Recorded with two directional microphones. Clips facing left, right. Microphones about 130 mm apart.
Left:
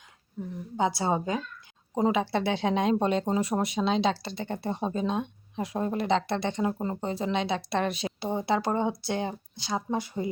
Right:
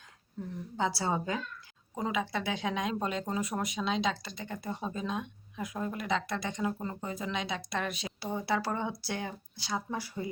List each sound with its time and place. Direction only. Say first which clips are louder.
0.4 s a woman's voice: left 3 dB; 10° left (ahead or behind)
0.8 s speech: left 5 dB; 20° left (ahead or behind)
2.0 s speech: left 7 dB; 30° left (ahead or behind)